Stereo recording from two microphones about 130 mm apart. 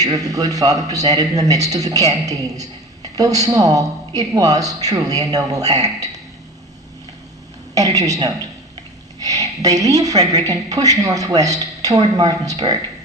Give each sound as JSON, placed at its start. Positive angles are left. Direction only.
{"t": 0.0, "sound": "a woman's voice", "side_deg": -25}
{"t": 7.8, "sound": "a woman's voice", "side_deg": -25}